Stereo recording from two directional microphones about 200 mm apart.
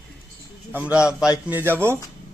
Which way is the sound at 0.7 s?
10° right (ahead or behind).